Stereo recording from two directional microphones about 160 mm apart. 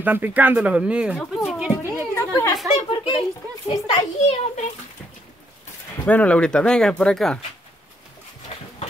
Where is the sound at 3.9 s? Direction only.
45° left (ahead or behind).